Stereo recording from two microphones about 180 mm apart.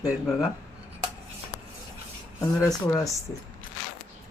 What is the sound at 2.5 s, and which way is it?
Speech, 15° left (ahead or behind).